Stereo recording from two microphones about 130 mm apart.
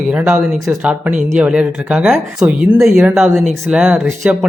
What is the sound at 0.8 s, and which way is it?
Speech, 10° right (ahead or behind).